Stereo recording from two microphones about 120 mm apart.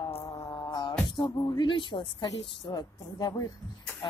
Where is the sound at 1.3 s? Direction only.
30° left (ahead or behind).